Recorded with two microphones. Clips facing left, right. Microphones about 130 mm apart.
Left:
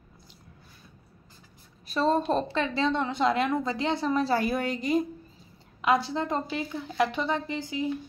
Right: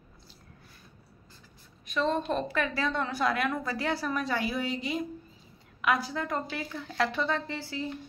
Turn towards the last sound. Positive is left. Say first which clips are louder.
# left 4 dB
turn(degrees=15)  # may be behind; listen again after turning